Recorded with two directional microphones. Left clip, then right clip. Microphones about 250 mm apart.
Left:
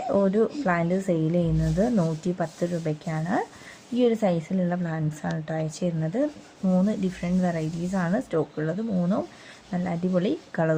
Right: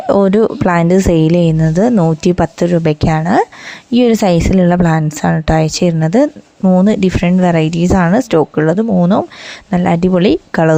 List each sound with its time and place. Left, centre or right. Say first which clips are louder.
0.1 s a woman's voice: right 13 dB; right